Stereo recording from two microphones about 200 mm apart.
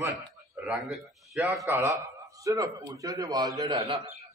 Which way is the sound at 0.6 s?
5° right (ahead or behind).